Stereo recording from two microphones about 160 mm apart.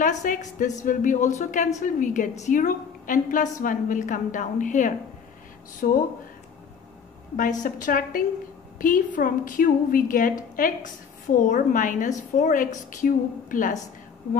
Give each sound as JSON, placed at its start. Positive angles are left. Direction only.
{"t": 0.0, "sound": "a woman's voice", "side_deg": 55}
{"t": 7.3, "sound": "a woman's voice", "side_deg": 55}